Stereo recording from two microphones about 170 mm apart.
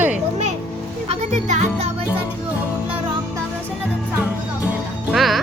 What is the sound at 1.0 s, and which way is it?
Speech, 45° right (ahead or behind).